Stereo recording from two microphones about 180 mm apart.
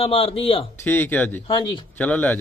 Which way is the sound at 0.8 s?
10° left (ahead or behind).